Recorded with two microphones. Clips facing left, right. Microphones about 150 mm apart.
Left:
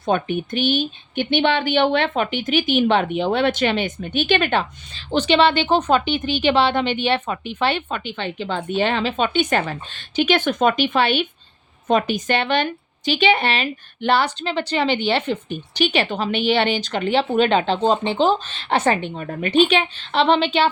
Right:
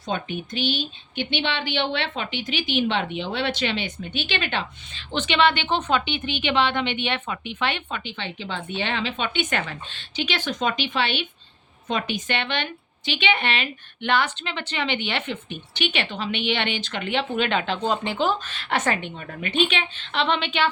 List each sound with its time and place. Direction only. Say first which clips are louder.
0.0 s a woman's voice: left 8 dB; 50° left (ahead or behind); by 20.7 s 35° left (ahead or behind)